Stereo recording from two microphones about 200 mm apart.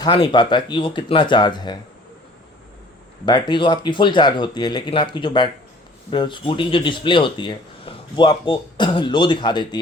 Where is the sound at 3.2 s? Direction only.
20° left (ahead or behind).